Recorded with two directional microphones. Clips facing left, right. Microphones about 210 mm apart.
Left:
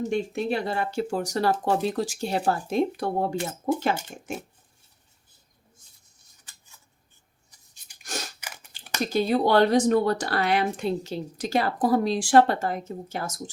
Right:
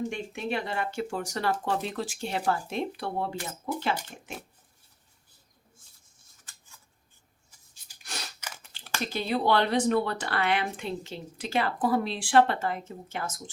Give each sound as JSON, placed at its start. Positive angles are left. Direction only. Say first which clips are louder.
{"t": 0.1, "sound": "speech", "louder": "left 6 dB", "side_deg": 35}
{"t": 8.0, "sound": "scissors", "louder": "left 6 dB", "side_deg": 45}
{"t": 8.4, "sound": "chewing", "louder": "left 1 dB", "side_deg": 15}
{"t": 9.0, "sound": "speech", "louder": "left 4 dB", "side_deg": 40}